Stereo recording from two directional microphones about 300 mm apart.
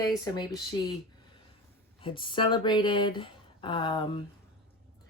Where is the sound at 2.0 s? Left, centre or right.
Centre.